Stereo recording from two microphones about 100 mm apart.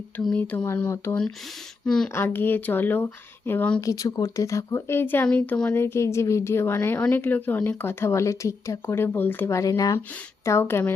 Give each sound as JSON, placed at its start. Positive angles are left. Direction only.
{"t": 0.2, "sound": "speech", "side_deg": 5}
{"t": 0.4, "sound": "speech", "side_deg": 20}
{"t": 1.8, "sound": "speech", "side_deg": 5}
{"t": 2.1, "sound": "speech", "side_deg": 20}
{"t": 3.8, "sound": "speech", "side_deg": 35}
{"t": 9.6, "sound": "speech", "side_deg": 35}
{"t": 10.4, "sound": "speech", "side_deg": 25}